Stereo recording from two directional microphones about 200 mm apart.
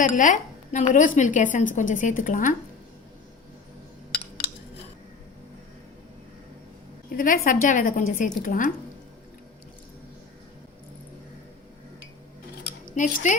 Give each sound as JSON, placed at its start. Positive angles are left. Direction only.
{"t": 0.0, "sound": "a woman's voice", "side_deg": 40}
{"t": 7.1, "sound": "a woman's voice", "side_deg": 45}
{"t": 13.0, "sound": "a woman's voice", "side_deg": 40}